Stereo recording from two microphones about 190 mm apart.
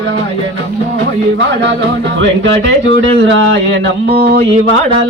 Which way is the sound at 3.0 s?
75° right (ahead or behind).